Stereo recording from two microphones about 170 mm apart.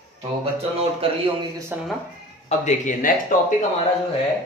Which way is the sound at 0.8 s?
35° right (ahead or behind).